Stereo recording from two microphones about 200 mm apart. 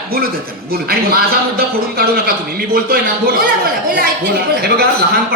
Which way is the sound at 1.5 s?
50° right (ahead or behind).